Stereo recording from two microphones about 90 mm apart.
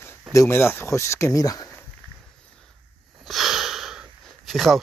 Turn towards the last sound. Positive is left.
turn(degrees=0)  # may be behind; listen again after turning